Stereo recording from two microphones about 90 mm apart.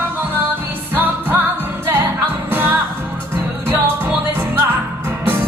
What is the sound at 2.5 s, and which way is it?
Music, 25° right (ahead or behind).